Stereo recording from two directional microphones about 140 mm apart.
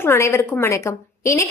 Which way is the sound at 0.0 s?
20° left (ahead or behind).